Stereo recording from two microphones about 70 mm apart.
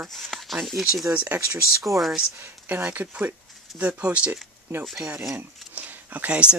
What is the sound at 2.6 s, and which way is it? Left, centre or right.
Speech, right.